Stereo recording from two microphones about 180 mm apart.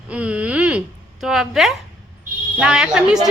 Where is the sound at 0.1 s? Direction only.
5° right (ahead or behind).